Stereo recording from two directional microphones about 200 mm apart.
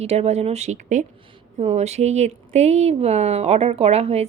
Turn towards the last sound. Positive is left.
turn(degrees=-30)  # may be behind; listen again after turning